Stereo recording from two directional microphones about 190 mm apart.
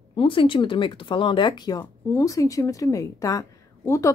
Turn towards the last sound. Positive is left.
turn(degrees=15)  # may be behind; listen again after turning